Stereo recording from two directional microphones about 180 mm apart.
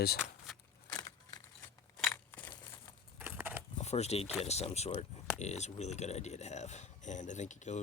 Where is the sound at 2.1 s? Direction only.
10° left (ahead or behind).